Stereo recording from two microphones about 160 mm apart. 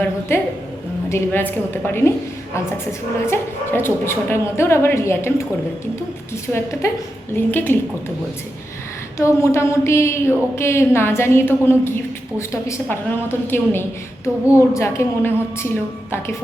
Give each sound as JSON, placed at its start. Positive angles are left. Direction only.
{"t": 1.1, "sound": "speech", "side_deg": 15}
{"t": 3.2, "sound": "speech", "side_deg": 15}
{"t": 6.5, "sound": "speech", "side_deg": 15}
{"t": 9.1, "sound": "speech", "side_deg": 20}